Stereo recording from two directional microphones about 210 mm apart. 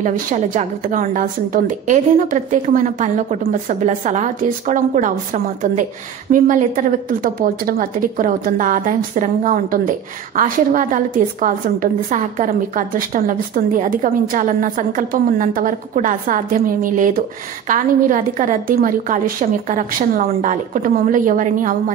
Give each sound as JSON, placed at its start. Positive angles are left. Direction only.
{"t": 0.0, "sound": "a woman's voice", "side_deg": -35}